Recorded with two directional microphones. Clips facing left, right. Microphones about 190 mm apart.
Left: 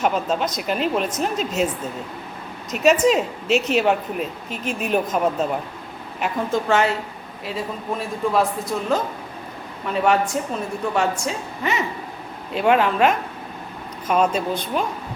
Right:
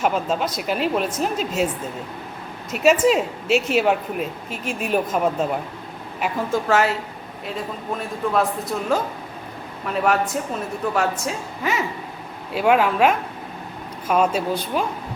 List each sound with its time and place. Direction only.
0.0 s a woman's voice: 5° right (ahead or behind)
2.7 s a woman's voice: 5° right (ahead or behind)